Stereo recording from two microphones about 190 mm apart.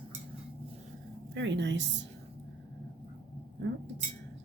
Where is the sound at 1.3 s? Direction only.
70° right (ahead or behind).